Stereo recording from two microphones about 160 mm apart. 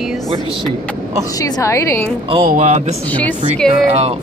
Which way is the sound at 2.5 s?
45° right (ahead or behind).